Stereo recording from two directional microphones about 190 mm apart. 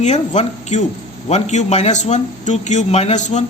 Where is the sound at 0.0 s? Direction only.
35° left (ahead or behind).